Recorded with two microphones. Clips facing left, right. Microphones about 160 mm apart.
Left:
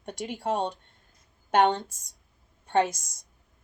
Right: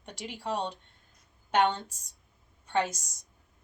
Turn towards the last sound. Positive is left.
turn(degrees=50)  # may be behind; listen again after turning